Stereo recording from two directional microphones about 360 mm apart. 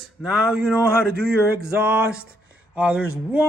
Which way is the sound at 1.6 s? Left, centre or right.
Centre.